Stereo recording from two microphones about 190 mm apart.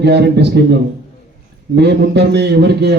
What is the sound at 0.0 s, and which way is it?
A man's voice, 60° right (ahead or behind).